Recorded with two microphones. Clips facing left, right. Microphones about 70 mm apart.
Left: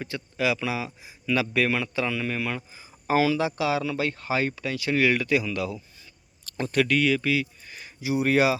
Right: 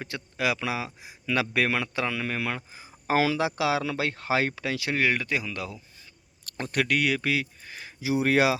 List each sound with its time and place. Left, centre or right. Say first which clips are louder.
0.1 s speech: left 2 dB; right
2.7 s speech: left 2 dB; right
4.9 s speech: left 5 dB; right
6.6 s speech: left 3 dB; right